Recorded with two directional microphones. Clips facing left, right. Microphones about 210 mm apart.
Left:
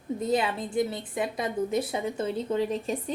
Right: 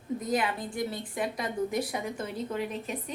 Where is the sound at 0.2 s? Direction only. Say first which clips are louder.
Left 4 dB; 25° left (ahead or behind).